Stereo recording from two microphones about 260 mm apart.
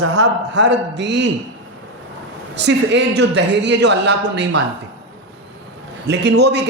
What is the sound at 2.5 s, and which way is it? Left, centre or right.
A man's voice, right.